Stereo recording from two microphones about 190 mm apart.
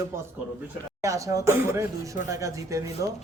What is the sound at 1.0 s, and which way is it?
Speech, 15° right (ahead or behind).